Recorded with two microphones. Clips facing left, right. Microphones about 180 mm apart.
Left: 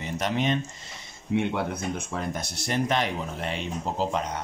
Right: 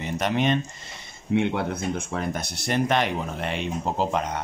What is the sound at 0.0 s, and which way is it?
Speech, 60° right (ahead or behind).